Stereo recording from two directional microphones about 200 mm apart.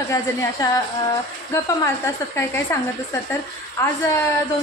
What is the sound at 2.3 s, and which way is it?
Speech, 10° left (ahead or behind).